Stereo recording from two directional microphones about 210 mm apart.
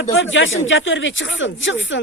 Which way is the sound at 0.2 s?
65° left (ahead or behind).